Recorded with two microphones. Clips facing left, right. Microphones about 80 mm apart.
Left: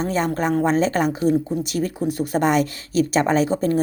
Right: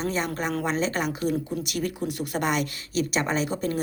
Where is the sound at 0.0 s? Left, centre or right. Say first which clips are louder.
Left 6 dB; left.